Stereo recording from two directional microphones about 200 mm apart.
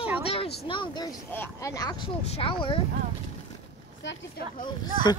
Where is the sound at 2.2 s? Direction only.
30° left (ahead or behind).